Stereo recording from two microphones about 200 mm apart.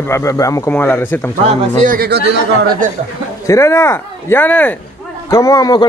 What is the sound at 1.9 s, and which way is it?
Speech, 50° right (ahead or behind).